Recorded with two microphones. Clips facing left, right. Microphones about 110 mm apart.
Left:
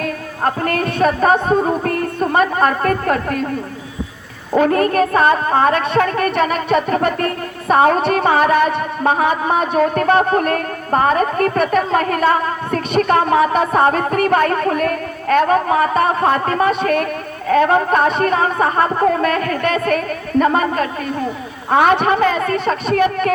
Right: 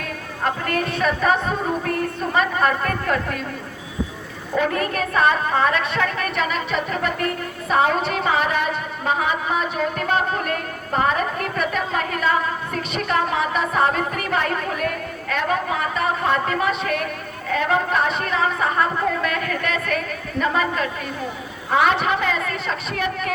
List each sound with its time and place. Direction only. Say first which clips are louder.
0.0 s a woman's voice: left 5 dB; 45° left (ahead or behind)
4.5 s a woman's voice: left 8 dB; 45° left (ahead or behind)